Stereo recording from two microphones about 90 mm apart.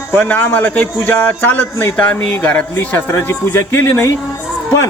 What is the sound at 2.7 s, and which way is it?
A man's voice, 30° left (ahead or behind).